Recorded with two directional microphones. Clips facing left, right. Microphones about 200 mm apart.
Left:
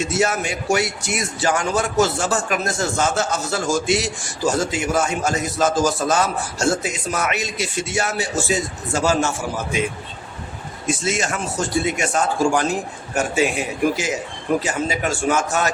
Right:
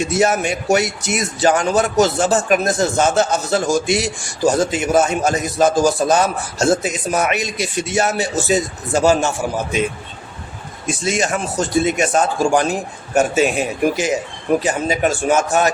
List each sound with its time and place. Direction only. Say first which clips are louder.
0.0 s a man's voice: right 4 dB; 15° right (ahead or behind)
10.8 s a man's voice: right 3 dB; 15° right (ahead or behind)
14.6 s a man's voice: right 5 dB; 20° right (ahead or behind)